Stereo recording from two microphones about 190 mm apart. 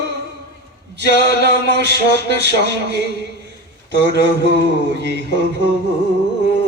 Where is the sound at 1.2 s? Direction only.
65° right (ahead or behind).